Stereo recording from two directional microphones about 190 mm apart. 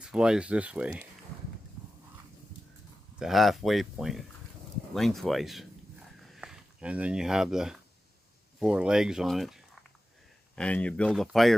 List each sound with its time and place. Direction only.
0.0 s speech: 5° right (ahead or behind)
3.2 s speech: centre (ahead or behind)